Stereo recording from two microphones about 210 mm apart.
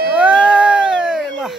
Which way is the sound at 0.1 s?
5° right (ahead or behind).